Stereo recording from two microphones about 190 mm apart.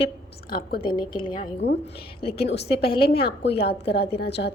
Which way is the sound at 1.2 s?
25° left (ahead or behind).